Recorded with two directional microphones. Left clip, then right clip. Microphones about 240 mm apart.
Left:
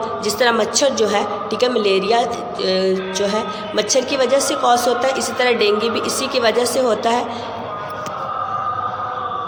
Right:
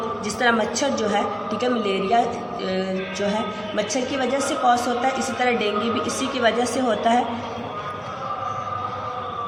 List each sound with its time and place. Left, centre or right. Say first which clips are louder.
0.3 s a woman's voice: left 4 dB; left
3.8 s a woman's voice: left 7 dB; left